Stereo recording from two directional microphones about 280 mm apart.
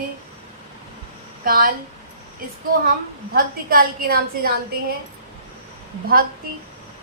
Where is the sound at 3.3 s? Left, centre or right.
Right.